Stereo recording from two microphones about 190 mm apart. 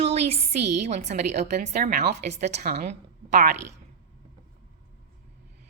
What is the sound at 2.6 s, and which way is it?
Speech, 55° right (ahead or behind).